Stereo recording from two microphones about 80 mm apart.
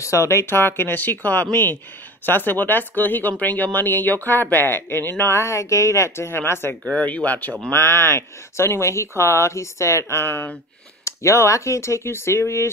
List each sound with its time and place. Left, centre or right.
0.0 s speech: left